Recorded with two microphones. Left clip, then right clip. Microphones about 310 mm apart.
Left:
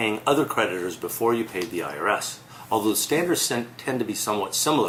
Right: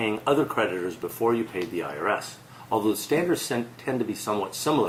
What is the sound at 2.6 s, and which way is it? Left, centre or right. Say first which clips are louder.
Speech: left 1 dB; right.